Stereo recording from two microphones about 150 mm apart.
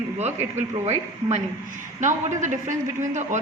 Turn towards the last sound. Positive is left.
turn(degrees=-55)  # may be behind; listen again after turning